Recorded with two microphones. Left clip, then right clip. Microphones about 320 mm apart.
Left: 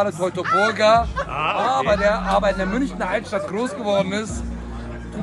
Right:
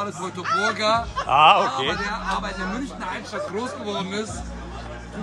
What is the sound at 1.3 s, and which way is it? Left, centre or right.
Speech, right.